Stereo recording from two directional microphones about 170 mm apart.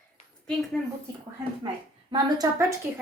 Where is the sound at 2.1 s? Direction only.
20° right (ahead or behind).